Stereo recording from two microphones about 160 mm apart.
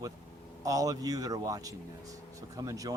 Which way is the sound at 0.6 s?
20° right (ahead or behind).